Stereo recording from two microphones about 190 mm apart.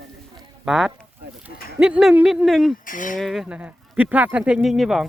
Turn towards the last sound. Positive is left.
turn(degrees=0)  # may be behind; listen again after turning